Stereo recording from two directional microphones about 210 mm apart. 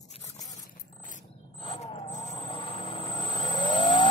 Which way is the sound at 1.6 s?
25° left (ahead or behind).